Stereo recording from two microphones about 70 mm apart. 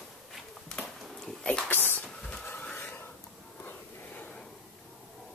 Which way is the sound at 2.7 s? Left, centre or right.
Left.